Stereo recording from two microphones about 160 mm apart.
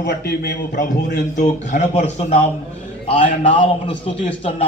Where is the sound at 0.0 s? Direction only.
90° left.